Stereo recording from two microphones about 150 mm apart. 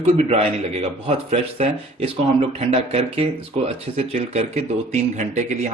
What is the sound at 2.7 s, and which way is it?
Speech, 45° right (ahead or behind).